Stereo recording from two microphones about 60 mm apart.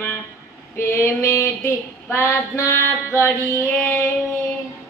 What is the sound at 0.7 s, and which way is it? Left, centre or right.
Female singing, left.